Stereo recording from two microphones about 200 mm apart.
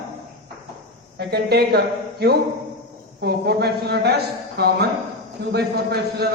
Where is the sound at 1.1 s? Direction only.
55° right (ahead or behind).